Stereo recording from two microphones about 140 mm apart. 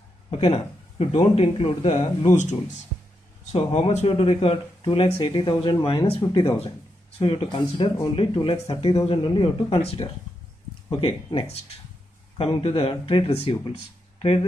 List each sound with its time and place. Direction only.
0.3 s speech: 45° left (ahead or behind)
3.5 s speech: 45° left (ahead or behind)